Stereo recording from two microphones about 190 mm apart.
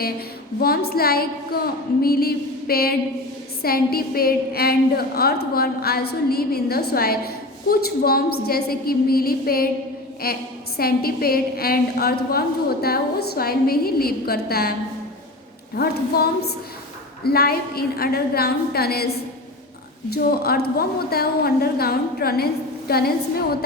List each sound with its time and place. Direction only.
0.6 s a woman's voice: 55° left (ahead or behind)